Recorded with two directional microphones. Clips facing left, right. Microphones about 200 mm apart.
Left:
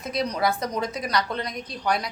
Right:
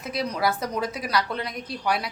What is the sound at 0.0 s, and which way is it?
A woman's voice, 5° right (ahead or behind).